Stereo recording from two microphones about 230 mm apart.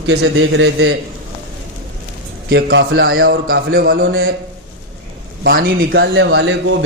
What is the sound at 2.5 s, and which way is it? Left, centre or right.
A man's voice, right.